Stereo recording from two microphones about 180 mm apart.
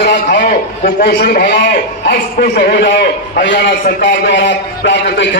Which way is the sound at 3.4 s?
80° left.